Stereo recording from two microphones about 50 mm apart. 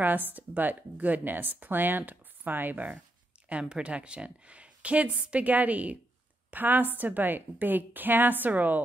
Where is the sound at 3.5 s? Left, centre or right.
Right.